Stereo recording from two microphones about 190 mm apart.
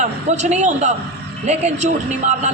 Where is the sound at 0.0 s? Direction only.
35° right (ahead or behind).